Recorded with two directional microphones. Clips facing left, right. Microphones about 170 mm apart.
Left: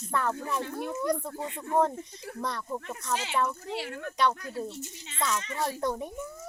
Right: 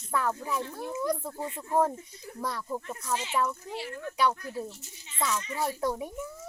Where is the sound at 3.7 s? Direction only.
80° left.